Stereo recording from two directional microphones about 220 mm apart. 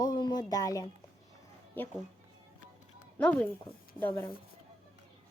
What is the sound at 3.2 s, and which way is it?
Speech, 5° left (ahead or behind).